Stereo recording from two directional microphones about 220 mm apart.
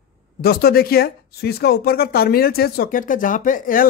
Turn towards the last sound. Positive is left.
turn(degrees=40)  # may be behind; listen again after turning